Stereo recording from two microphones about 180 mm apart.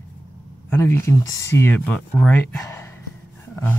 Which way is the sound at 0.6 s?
15° left (ahead or behind).